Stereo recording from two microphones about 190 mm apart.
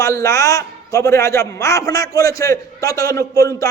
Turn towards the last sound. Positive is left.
turn(degrees=15)  # may be behind; listen again after turning